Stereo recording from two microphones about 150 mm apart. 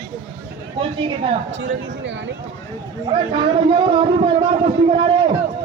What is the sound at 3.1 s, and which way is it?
A man's voice, 30° right (ahead or behind).